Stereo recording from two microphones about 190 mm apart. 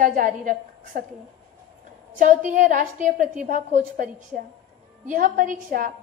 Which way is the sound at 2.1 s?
45° right (ahead or behind).